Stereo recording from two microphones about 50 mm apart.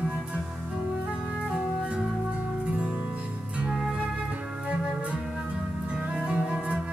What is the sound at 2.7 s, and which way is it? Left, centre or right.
Music, right.